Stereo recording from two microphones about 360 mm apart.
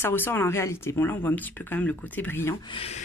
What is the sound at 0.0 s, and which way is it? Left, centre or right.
Speech, centre.